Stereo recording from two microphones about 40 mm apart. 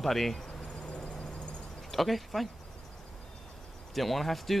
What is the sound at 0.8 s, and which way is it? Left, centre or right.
Vehicle, left.